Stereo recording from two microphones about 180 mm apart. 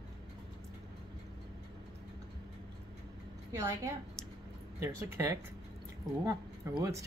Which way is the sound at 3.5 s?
15° right (ahead or behind).